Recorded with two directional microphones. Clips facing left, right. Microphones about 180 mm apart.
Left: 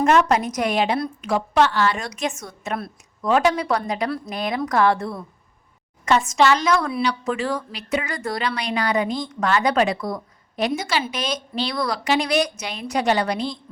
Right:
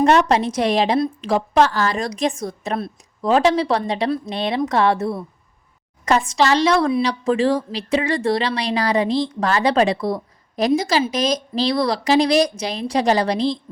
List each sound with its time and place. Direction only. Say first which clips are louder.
0.0 s a woman's voice: right 2 dB; 35° right (ahead or behind)